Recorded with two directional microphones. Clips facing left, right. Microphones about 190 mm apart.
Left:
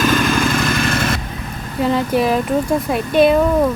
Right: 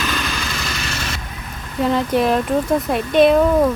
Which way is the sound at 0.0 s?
50° left (ahead or behind).